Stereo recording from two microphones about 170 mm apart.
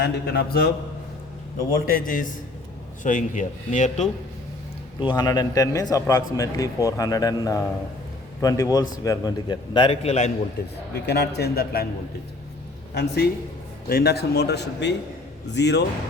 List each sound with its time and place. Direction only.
0.0 s a man's voice: 75° left (ahead or behind)
1.9 s a man's voice: 55° left (ahead or behind)
4.9 s a man's voice: 25° left (ahead or behind)
10.9 s a man's voice: 75° left (ahead or behind)
12.9 s a man's voice: 70° left (ahead or behind)